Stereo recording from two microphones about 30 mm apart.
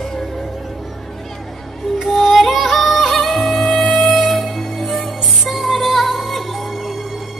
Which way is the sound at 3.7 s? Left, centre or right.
Left.